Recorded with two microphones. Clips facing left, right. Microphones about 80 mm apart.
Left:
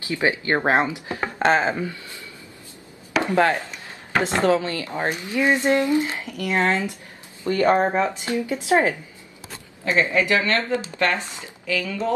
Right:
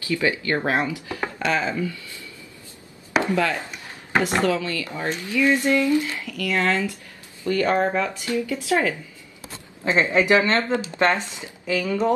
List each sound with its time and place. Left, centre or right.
0.0 s speech: left
3.1 s chopping: right
4.2 s speech: left
9.8 s speech: right